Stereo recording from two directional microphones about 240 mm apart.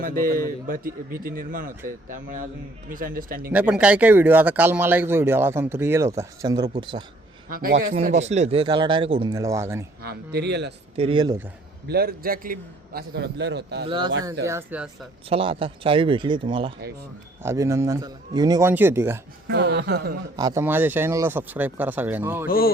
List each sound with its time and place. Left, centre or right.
0.0 s a man's voice: right
3.5 s speech: centre
7.5 s a man's voice: right; by 9.8 s centre
10.0 s a man's voice: right
10.9 s speech: right
11.9 s a man's voice: right
13.8 s speech: centre
14.4 s speech: centre
15.3 s speech: right
19.5 s a man's voice: right
20.3 s speech: centre
22.4 s speech: left